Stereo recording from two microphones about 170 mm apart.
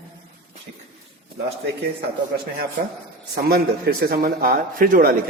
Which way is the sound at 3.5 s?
65° right (ahead or behind).